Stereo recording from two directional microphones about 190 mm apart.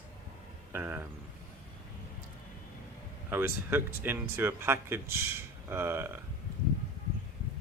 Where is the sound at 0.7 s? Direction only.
10° right (ahead or behind).